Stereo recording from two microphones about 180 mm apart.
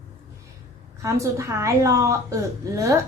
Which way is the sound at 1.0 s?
15° right (ahead or behind).